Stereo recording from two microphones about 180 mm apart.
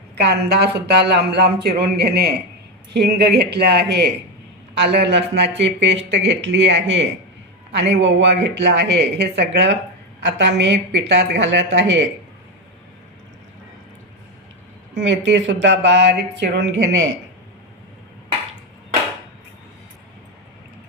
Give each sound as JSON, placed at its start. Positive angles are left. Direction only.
{"t": 0.2, "sound": "speech", "side_deg": -65}
{"t": 14.9, "sound": "speech", "side_deg": -85}